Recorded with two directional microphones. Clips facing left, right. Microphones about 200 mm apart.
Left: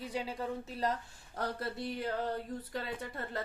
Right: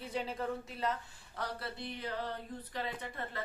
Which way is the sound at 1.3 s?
40° left (ahead or behind).